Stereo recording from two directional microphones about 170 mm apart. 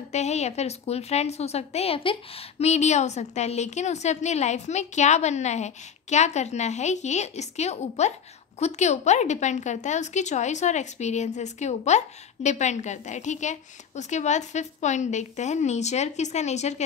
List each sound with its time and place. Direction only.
0.1 s a woman's voice: 40° left (ahead or behind)